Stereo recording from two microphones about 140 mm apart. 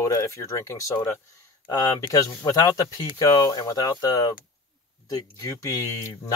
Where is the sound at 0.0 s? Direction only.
20° left (ahead or behind).